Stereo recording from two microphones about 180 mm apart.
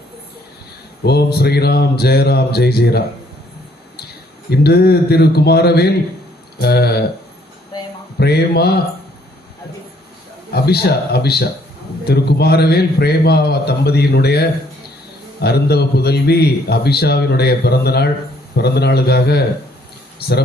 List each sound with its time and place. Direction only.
1.0 s a man's voice: 65° left (ahead or behind)
4.5 s a man's voice: 60° left (ahead or behind)
8.2 s a man's voice: 65° left (ahead or behind)
10.5 s a man's voice: 60° left (ahead or behind)